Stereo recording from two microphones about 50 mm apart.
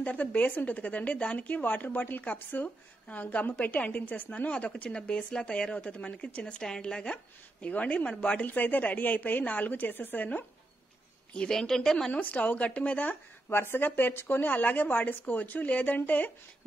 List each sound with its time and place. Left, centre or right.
0.0 s a woman's voice: left
11.3 s a woman's voice: centre
12.1 s a woman's voice: left
13.5 s a woman's voice: left